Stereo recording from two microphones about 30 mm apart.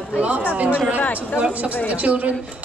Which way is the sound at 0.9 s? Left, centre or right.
Left.